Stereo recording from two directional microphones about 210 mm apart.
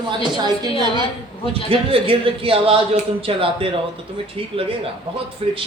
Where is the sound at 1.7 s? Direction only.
25° right (ahead or behind).